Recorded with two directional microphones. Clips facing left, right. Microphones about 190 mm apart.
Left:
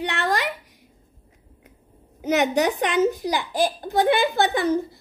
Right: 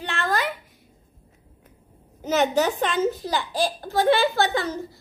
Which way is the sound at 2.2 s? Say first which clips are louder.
Left 1 dB; 15° left (ahead or behind).